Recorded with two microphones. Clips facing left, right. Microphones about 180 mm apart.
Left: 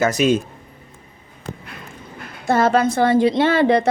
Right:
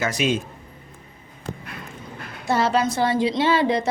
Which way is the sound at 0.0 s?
45° left (ahead or behind).